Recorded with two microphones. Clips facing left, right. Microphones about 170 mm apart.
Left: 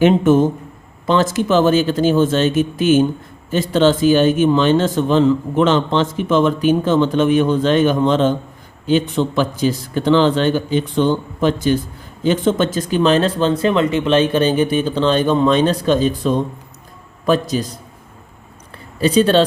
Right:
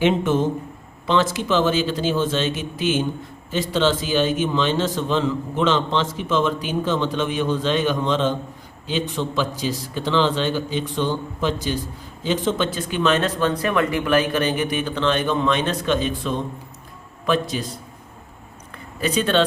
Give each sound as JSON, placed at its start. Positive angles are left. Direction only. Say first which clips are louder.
{"t": 0.0, "sound": "speech", "louder": "left 7 dB", "side_deg": 50}
{"t": 18.9, "sound": "speech", "louder": "left 7 dB", "side_deg": 30}